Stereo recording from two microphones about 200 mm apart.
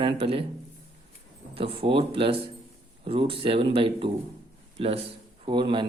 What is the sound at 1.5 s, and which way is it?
A man's voice, 25° right (ahead or behind).